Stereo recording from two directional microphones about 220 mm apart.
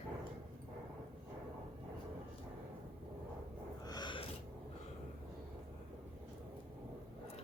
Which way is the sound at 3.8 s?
20° left (ahead or behind).